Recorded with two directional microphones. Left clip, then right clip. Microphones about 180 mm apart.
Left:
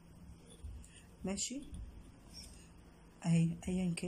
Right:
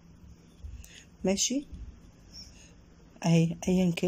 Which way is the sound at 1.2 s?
50° right (ahead or behind).